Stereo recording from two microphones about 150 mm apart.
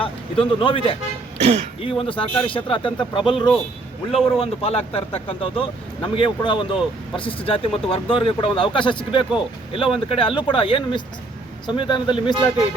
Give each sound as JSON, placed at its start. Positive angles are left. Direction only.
{"t": 0.0, "sound": "speech", "side_deg": 35}
{"t": 1.4, "sound": "speech", "side_deg": -40}
{"t": 1.8, "sound": "speech", "side_deg": 35}